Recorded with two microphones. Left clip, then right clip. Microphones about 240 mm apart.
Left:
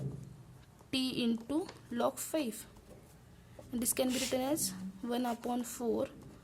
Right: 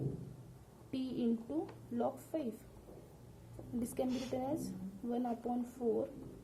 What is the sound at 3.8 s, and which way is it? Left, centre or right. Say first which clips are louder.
Speech: left 5 dB; left.